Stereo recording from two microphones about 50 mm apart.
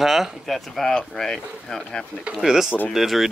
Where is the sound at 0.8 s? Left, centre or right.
Centre.